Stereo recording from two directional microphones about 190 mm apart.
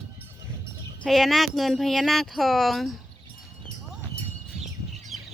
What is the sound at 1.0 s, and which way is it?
Speech, centre (ahead or behind).